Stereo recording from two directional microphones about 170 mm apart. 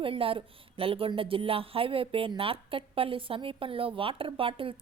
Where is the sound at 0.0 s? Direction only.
30° right (ahead or behind).